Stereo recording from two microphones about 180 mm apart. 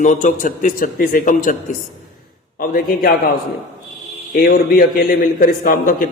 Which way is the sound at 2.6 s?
55° left (ahead or behind).